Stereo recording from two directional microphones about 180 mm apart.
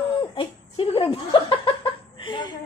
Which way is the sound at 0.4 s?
30° left (ahead or behind).